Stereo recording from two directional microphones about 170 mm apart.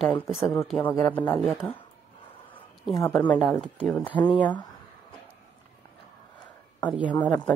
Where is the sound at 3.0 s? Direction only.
10° left (ahead or behind).